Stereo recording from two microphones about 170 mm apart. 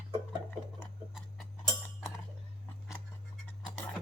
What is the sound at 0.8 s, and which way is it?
Tick-tock, 5° right (ahead or behind).